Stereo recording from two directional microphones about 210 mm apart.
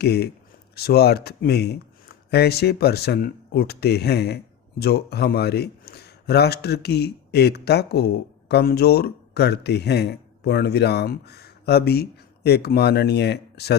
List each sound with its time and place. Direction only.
0.0 s speech: 50° left (ahead or behind)